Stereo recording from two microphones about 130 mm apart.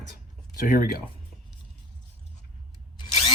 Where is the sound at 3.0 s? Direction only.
40° left (ahead or behind).